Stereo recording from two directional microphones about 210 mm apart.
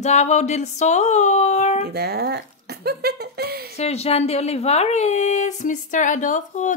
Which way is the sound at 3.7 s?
30° left (ahead or behind).